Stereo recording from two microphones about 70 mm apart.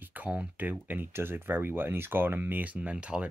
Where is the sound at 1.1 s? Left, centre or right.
Right.